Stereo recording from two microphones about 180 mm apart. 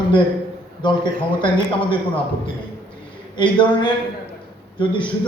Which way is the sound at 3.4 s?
25° left (ahead or behind).